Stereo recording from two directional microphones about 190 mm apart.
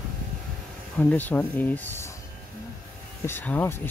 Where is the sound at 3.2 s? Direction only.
10° left (ahead or behind).